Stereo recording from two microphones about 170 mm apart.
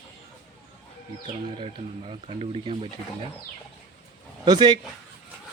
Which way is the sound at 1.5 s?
35° right (ahead or behind).